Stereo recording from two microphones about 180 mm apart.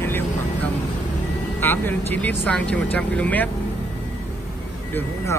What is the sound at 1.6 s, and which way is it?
Speech, 10° left (ahead or behind).